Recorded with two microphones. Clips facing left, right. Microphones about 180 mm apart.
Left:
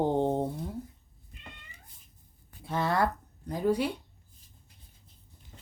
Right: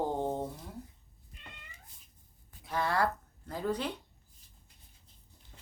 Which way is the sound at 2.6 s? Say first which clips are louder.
Left 3 dB; 25° left (ahead or behind).